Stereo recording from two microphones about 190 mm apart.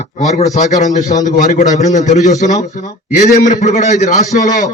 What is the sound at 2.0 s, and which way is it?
A man's voice, 40° left (ahead or behind).